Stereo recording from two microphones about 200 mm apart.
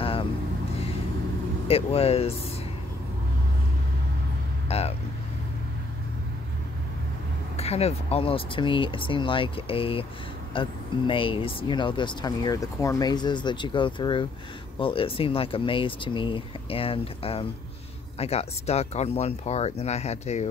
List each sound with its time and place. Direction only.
0.0 s vehicle: 25° left (ahead or behind)
1.7 s speech: 30° left (ahead or behind)
4.6 s vehicle: 30° left (ahead or behind)
7.5 s speech: 30° left (ahead or behind)